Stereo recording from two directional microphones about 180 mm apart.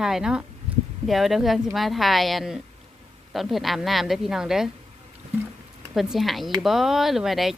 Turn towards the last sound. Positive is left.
turn(degrees=0)  # may be behind; listen again after turning